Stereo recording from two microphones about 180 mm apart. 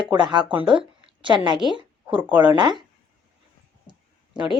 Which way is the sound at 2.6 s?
25° right (ahead or behind).